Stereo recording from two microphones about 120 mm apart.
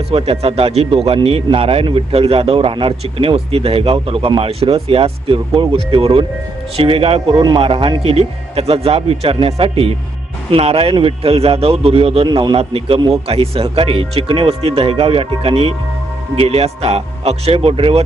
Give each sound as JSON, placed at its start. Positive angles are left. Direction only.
{"t": 0.1, "sound": "speech", "side_deg": -55}